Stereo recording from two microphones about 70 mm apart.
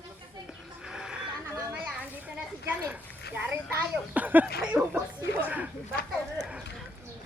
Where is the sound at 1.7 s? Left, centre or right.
Centre.